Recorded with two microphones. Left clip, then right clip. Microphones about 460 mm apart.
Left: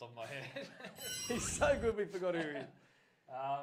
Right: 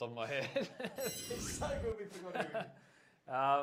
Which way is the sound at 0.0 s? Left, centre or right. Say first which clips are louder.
Right 7 dB; right.